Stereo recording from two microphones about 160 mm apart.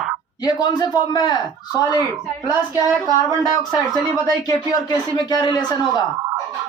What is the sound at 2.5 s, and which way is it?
Speech, 20° right (ahead or behind).